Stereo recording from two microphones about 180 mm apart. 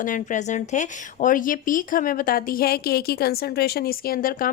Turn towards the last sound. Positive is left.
turn(degrees=50)  # may be behind; listen again after turning